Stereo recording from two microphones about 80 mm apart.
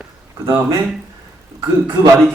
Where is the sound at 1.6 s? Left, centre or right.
Right.